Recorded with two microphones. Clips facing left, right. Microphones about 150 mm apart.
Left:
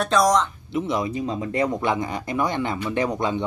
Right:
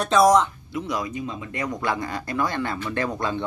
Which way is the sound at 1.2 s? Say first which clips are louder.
Left 6 dB; 35° left (ahead or behind).